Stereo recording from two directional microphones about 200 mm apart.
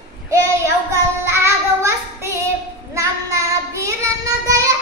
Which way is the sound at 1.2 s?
15° right (ahead or behind).